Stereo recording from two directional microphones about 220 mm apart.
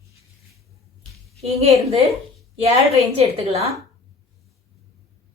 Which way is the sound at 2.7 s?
25° right (ahead or behind).